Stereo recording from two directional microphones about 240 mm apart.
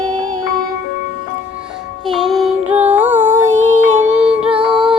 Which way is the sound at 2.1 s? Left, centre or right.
Centre.